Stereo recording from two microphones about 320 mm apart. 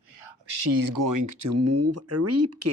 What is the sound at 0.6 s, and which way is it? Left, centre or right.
Speech, right.